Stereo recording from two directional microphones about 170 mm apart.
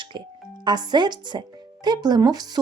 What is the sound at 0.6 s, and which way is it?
Speech, 25° right (ahead or behind).